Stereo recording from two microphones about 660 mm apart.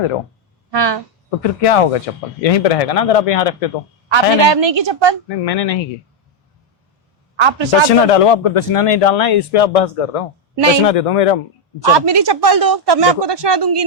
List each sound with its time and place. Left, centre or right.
0.7 s speech: right
1.4 s a man's voice: left
4.1 s a woman's voice: right
5.3 s a man's voice: left
7.3 s speech: right
7.9 s a man's voice: left
10.5 s speech: right
10.8 s a man's voice: left
12.0 s speech: right